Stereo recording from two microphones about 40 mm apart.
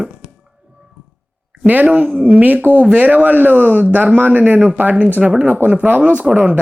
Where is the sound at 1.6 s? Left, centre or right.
Right.